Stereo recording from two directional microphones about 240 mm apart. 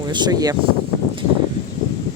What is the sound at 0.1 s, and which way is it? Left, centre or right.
Speech, centre.